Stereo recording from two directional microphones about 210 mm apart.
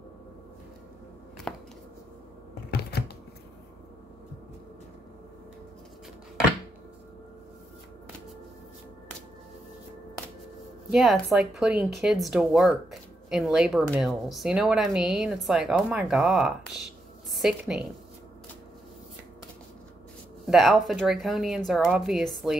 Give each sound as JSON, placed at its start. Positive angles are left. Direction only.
{"t": 1.5, "sound": "a sound", "side_deg": 5}
{"t": 2.7, "sound": "shuffling cards", "side_deg": 50}
{"t": 10.9, "sound": "a woman's voice", "side_deg": 0}
{"t": 20.4, "sound": "speech", "side_deg": 0}